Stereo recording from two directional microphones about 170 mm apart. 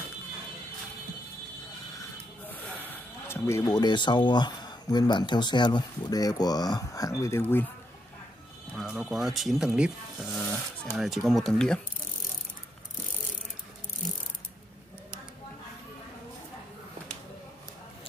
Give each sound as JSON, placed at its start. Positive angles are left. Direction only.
{"t": 2.0, "sound": "speech", "side_deg": 10}
{"t": 8.7, "sound": "speech", "side_deg": -5}